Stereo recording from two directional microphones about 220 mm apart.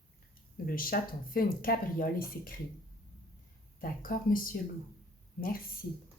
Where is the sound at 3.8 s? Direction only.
40° left (ahead or behind).